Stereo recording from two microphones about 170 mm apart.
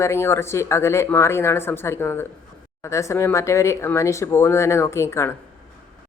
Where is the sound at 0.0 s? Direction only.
15° left (ahead or behind).